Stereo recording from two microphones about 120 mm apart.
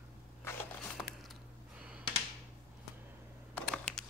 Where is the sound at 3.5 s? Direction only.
5° left (ahead or behind).